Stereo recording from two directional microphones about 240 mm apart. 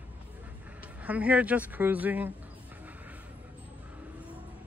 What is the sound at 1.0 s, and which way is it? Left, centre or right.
Speech, centre.